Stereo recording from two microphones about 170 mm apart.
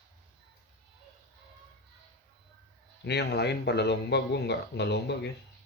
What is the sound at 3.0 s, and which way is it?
Speech, 80° left.